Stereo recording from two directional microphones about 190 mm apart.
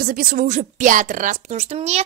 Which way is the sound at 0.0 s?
50° right (ahead or behind).